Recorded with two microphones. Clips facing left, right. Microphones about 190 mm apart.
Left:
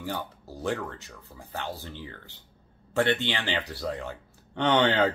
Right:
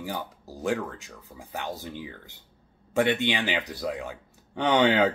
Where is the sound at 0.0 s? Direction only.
10° right (ahead or behind).